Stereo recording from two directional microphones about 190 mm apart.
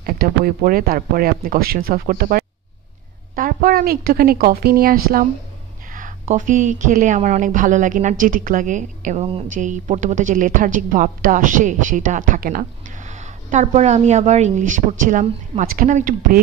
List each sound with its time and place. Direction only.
0.0 s a woman's voice: 50° right (ahead or behind)